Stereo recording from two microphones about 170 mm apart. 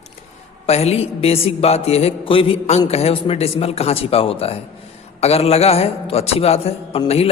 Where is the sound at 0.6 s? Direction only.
40° left (ahead or behind).